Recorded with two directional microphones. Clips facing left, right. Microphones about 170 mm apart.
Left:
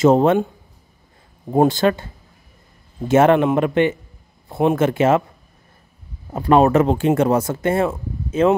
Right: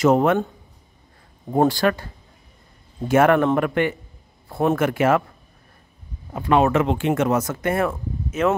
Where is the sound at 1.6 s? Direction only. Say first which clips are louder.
Left 1 dB; 25° left (ahead or behind).